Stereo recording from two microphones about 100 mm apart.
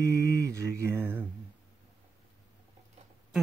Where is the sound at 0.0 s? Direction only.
30° right (ahead or behind).